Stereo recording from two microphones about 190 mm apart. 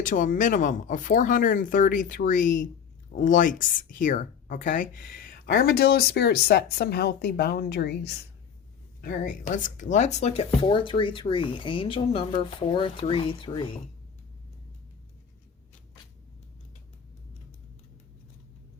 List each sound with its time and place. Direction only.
0.0 s speech: 45° left (ahead or behind); by 13.7 s 25° left (ahead or behind)